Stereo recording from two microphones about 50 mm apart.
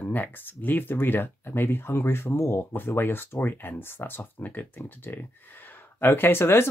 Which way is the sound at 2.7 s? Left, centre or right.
Left.